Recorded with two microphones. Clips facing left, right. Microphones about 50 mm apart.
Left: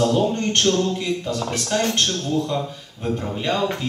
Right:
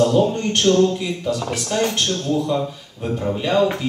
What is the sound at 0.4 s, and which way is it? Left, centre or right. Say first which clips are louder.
A man's voice: right 4 dB; centre.